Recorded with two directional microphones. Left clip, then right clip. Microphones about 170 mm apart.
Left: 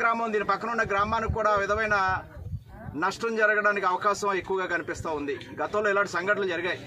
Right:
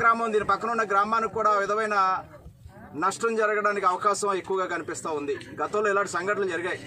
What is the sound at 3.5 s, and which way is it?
A man's voice, 10° left (ahead or behind).